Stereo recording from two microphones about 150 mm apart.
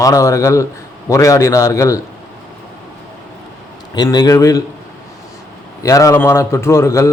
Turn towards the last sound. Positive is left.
turn(degrees=20)  # may be behind; listen again after turning